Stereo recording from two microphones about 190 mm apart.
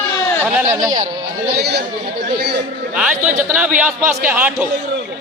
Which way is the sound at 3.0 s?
5° right (ahead or behind).